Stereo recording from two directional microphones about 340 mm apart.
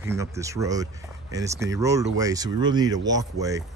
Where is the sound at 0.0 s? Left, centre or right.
Centre.